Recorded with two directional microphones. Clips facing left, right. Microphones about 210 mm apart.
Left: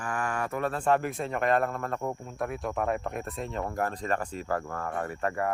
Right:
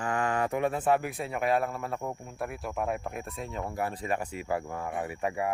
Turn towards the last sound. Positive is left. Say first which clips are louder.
# left 1 dB
turn(degrees=-10)  # may be behind; listen again after turning